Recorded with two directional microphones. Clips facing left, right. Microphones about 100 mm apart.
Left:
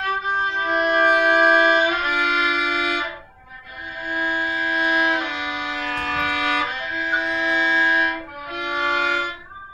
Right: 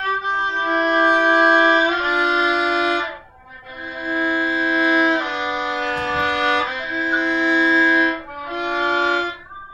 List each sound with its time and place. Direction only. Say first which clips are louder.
0.6 s violin: right 2 dB; 35° right (ahead or behind)
7.2 s music: right 6 dB; 30° right (ahead or behind)